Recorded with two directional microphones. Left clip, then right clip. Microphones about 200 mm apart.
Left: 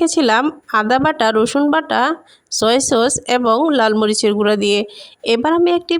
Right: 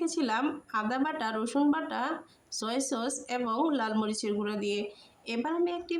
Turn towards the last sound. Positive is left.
turn(degrees=45)  # may be behind; listen again after turning